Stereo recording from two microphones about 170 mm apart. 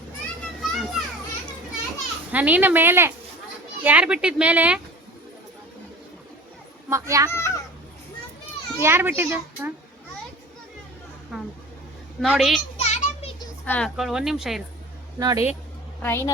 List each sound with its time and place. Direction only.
0.7 s children playing: centre (ahead or behind)
2.3 s speech: 10° right (ahead or behind)
6.9 s a child's voice: 20° right (ahead or behind)
7.3 s a woman's voice: 15° left (ahead or behind)
8.8 s speech: 15° right (ahead or behind)
11.3 s vehicle: centre (ahead or behind)
12.2 s speech: centre (ahead or behind)
12.7 s children playing: 40° left (ahead or behind)
13.7 s speech: 5° left (ahead or behind)
15.2 s a child's voice: 20° right (ahead or behind)
16.0 s a woman's voice: 15° left (ahead or behind)